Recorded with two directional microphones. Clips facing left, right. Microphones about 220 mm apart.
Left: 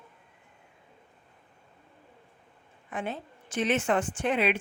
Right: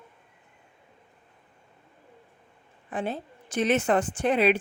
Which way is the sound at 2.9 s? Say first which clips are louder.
Right 4 dB; 35° right (ahead or behind).